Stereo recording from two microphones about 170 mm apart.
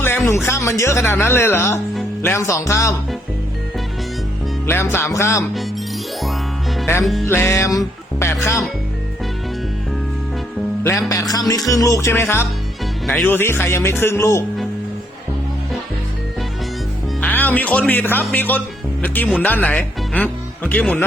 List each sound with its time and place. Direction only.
0.3 s speech: 15° left (ahead or behind)
4.6 s speech: 15° left (ahead or behind)
6.8 s music: 15° left (ahead or behind)
7.3 s speech: 15° left (ahead or behind)
11.1 s music: 20° left (ahead or behind)
13.1 s speech: 5° left (ahead or behind)
17.2 s speech: 10° left (ahead or behind)